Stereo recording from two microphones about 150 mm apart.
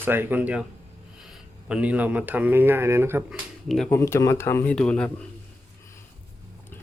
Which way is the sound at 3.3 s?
Centre (ahead or behind).